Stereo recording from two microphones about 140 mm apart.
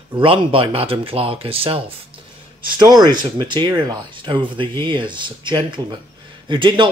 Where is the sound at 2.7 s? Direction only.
30° right (ahead or behind).